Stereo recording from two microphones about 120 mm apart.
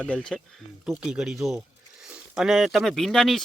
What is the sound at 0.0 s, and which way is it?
Speech, 10° left (ahead or behind).